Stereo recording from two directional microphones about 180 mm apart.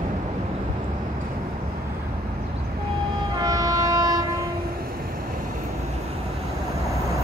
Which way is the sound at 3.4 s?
20° right (ahead or behind).